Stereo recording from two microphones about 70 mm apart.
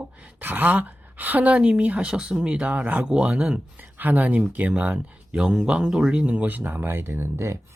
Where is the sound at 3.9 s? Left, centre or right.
Right.